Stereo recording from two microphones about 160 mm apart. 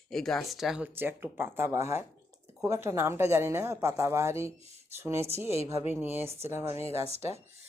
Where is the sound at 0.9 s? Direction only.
15° right (ahead or behind).